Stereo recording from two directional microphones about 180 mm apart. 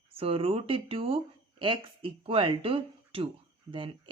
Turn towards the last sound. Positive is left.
turn(degrees=-25)  # may be behind; listen again after turning